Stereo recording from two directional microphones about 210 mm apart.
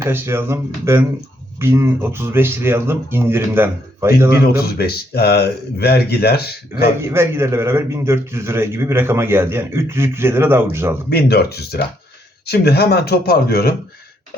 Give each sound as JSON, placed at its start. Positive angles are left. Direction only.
{"t": 0.0, "sound": "a man's voice", "side_deg": -10}
{"t": 4.8, "sound": "speech", "side_deg": 50}
{"t": 7.0, "sound": "a man's voice", "side_deg": -10}
{"t": 11.1, "sound": "speech", "side_deg": 50}